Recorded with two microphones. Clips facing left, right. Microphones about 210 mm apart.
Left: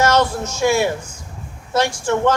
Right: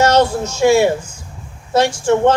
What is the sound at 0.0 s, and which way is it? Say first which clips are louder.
Speech: right 3 dB; 30° right (ahead or behind).